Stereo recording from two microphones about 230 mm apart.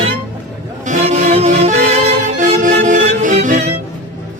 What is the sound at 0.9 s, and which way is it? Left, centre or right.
Music, right.